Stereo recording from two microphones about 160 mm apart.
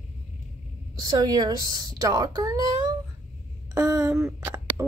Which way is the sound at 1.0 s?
25° right (ahead or behind).